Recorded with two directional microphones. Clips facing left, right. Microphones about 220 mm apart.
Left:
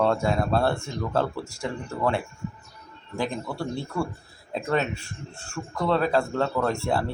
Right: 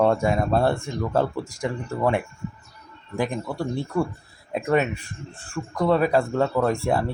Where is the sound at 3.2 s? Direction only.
20° right (ahead or behind).